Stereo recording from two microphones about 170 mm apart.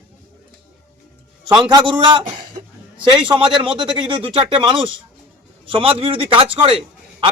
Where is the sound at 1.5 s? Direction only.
25° right (ahead or behind).